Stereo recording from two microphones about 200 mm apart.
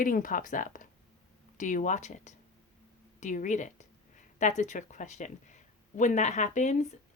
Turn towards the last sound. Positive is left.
turn(degrees=35)  # may be behind; listen again after turning